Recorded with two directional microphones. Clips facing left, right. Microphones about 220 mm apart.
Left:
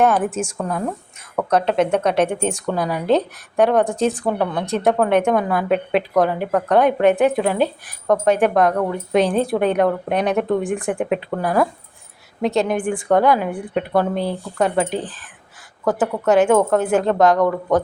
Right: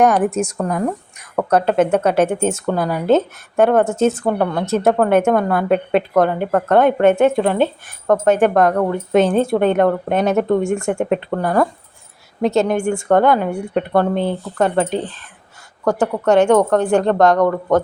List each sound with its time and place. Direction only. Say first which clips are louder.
0.5 s a woman's voice: right 4 dB; 10° right (ahead or behind)